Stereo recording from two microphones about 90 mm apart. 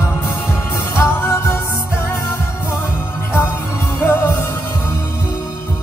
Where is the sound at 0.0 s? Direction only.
30° left (ahead or behind).